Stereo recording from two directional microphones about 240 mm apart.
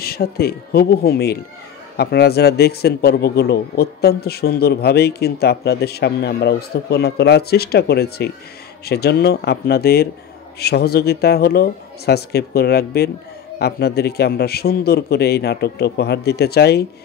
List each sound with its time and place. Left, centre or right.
0.0 s a man's voice: left